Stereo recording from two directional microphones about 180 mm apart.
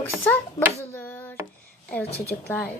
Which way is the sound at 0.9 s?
10° left (ahead or behind).